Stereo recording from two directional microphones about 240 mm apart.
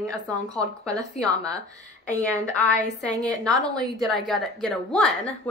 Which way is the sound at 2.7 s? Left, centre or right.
Centre.